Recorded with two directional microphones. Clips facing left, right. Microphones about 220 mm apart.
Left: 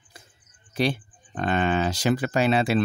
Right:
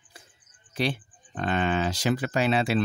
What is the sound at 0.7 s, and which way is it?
Speech, 45° left (ahead or behind).